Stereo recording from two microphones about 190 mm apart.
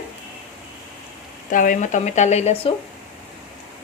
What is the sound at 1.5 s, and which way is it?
Stir, 45° left (ahead or behind).